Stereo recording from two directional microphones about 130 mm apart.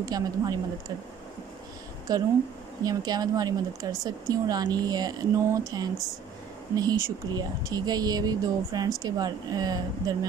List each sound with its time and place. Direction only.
0.0 s speech: 30° right (ahead or behind)
2.1 s speech: 30° right (ahead or behind)
6.7 s speech: 30° right (ahead or behind)